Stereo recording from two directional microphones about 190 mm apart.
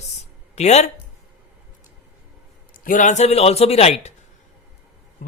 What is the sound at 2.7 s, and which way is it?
Speech, 45° left (ahead or behind).